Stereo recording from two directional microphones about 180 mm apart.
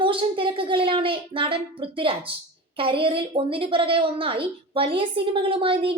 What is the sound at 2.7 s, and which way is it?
A woman's voice, 30° right (ahead or behind).